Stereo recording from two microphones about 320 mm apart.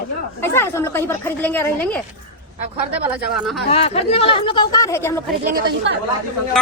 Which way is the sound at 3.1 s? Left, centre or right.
Centre.